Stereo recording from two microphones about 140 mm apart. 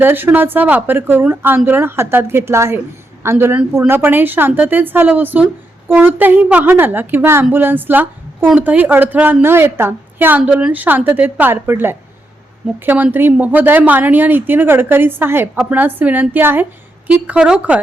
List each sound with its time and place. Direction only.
0.0 s a woman's voice: 15° right (ahead or behind)